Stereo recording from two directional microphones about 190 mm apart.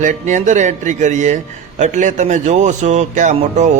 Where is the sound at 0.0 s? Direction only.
40° right (ahead or behind).